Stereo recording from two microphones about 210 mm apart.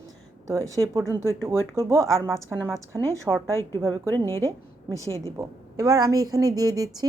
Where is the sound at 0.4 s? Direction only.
15° right (ahead or behind).